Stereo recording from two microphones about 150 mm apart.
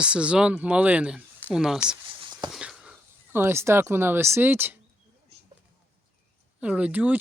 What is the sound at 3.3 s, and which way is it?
Speech, 15° right (ahead or behind).